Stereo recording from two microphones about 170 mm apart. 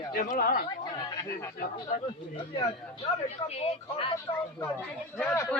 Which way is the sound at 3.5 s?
35° left (ahead or behind).